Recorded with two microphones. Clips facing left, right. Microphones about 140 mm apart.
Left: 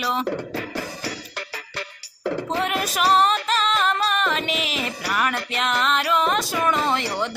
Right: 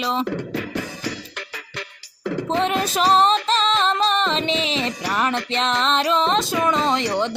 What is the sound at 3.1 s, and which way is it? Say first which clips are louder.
Music: right 2 dB; 30° right (ahead or behind).